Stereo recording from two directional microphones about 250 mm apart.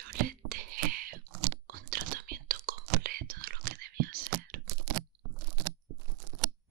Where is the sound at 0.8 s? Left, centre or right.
Right.